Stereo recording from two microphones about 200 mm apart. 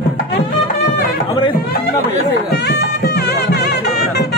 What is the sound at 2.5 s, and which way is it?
Music, 55° left (ahead or behind).